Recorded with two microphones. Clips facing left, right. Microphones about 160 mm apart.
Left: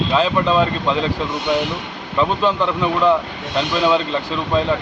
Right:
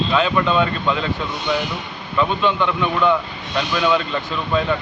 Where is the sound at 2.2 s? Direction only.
35° left (ahead or behind).